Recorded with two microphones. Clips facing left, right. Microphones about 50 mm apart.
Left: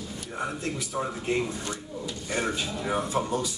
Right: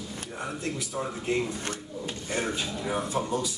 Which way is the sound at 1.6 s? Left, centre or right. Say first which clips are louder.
Even; right.